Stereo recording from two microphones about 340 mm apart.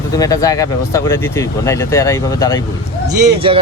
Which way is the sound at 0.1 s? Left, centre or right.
Centre.